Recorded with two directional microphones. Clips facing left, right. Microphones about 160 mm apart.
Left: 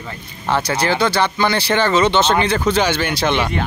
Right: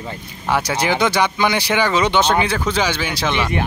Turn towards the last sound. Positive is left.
turn(degrees=0)  # may be behind; listen again after turning